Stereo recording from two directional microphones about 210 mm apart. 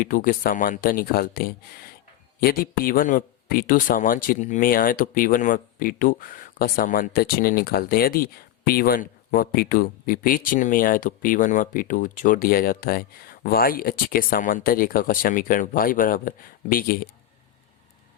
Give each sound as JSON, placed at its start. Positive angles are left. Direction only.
{"t": 0.0, "sound": "speech", "side_deg": 40}